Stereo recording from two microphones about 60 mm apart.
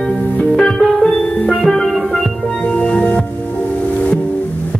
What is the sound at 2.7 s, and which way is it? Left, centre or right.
Music, centre.